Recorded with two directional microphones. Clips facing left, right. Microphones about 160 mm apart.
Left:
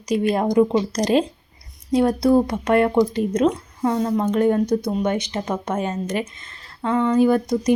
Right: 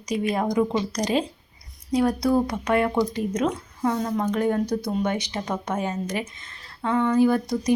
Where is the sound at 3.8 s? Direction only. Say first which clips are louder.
Left 1 dB; 25° left (ahead or behind).